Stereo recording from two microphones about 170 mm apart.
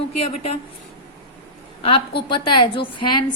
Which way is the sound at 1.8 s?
30° left (ahead or behind).